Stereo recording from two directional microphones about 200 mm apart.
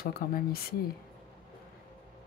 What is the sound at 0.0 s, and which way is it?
Speech, 45° left (ahead or behind).